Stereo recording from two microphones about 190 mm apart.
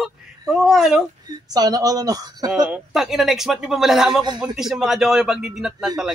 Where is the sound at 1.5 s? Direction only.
20° right (ahead or behind).